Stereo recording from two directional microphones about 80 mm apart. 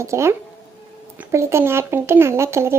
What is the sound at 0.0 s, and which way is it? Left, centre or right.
Speech, right.